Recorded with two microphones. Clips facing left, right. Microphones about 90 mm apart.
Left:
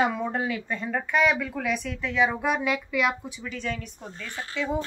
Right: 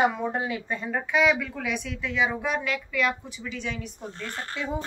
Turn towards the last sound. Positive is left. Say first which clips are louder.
# right 2 dB
turn(degrees=-55)  # may be behind; listen again after turning